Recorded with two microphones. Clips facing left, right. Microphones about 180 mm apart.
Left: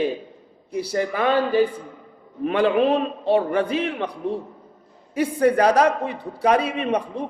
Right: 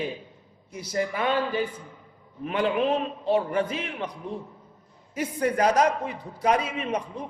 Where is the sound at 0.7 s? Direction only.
30° left (ahead or behind).